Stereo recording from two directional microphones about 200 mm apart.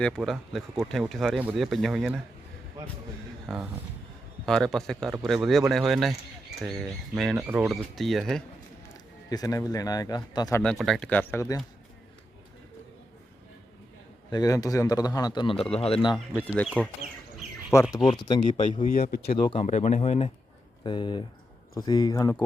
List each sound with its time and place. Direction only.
0.0 s speech: centre (ahead or behind)
3.4 s speech: 5° right (ahead or behind)
7.3 s speech: 10° right (ahead or behind)
7.7 s speech: centre (ahead or behind)
9.3 s a man's voice: 20° left (ahead or behind)
10.6 s speech: centre (ahead or behind)
14.3 s a man's voice: 20° left (ahead or behind)
16.1 s speech: 5° left (ahead or behind)
17.7 s speech: 15° left (ahead or behind)
18.3 s speech: 35° left (ahead or behind)
19.3 s a man's voice: 25° left (ahead or behind)